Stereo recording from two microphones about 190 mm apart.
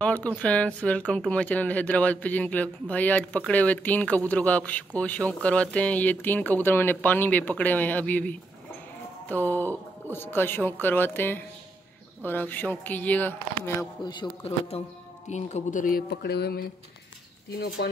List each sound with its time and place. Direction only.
0.0 s speech: 5° left (ahead or behind)
14.0 s a man's voice: 20° left (ahead or behind); by 17.8 s 60° left (ahead or behind)